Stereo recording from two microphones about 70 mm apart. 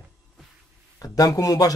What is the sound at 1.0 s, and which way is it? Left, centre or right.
Speech, left.